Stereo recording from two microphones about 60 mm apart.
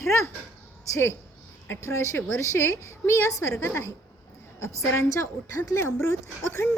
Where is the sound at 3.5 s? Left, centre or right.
Left.